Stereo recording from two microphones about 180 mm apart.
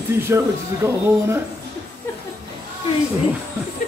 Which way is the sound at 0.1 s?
15° right (ahead or behind).